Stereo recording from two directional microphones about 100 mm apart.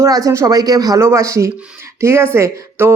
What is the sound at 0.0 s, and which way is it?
Speech, 35° right (ahead or behind).